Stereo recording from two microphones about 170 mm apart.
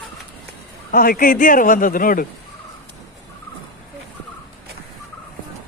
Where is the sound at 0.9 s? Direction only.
60° left (ahead or behind).